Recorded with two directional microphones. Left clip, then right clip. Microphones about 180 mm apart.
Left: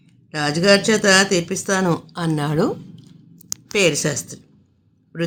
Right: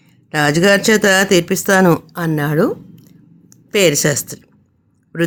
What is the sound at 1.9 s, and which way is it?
Speech, 30° right (ahead or behind).